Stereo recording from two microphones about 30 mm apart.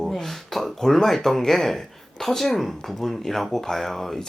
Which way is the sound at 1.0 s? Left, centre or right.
Centre.